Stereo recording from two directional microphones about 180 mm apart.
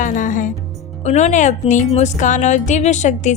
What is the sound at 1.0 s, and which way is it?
Speech, 40° left (ahead or behind).